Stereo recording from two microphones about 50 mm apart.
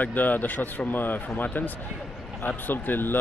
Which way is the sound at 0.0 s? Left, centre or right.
Left.